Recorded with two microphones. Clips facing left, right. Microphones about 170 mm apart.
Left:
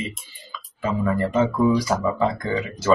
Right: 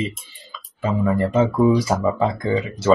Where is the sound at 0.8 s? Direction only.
25° right (ahead or behind).